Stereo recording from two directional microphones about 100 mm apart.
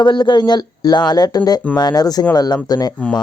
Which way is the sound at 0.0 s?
50° left (ahead or behind).